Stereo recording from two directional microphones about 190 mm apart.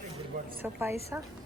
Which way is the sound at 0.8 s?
15° right (ahead or behind).